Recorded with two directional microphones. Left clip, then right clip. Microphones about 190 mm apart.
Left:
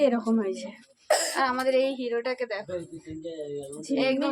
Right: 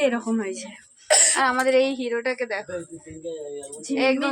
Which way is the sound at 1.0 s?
50° left (ahead or behind).